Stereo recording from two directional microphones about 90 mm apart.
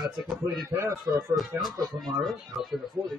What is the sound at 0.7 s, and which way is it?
Speech, 35° right (ahead or behind).